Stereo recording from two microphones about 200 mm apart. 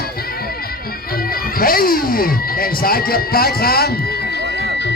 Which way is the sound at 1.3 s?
45° left (ahead or behind).